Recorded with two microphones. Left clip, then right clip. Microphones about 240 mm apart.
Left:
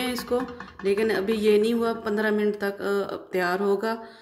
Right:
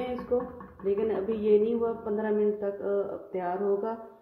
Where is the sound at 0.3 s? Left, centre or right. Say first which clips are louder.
Left 2 dB; left.